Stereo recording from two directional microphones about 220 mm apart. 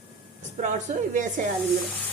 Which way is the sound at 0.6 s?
35° right (ahead or behind).